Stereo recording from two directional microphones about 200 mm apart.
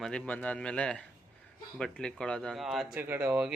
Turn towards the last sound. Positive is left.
turn(degrees=-5)  # may be behind; listen again after turning